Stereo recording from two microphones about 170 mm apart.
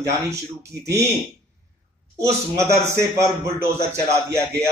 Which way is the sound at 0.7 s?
75° right (ahead or behind).